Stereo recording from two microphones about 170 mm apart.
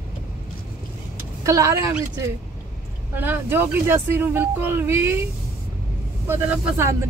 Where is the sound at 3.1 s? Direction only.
10° right (ahead or behind).